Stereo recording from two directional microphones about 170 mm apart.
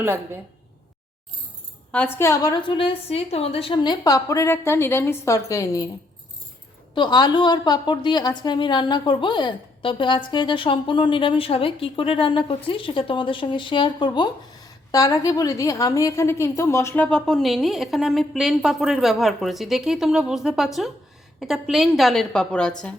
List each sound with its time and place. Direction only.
1.9 s a woman's voice: 10° left (ahead or behind)
6.9 s a woman's voice: 25° left (ahead or behind); by 22.7 s 5° left (ahead or behind)